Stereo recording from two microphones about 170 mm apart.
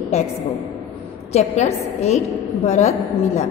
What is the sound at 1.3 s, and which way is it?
A woman's voice, 40° left (ahead or behind).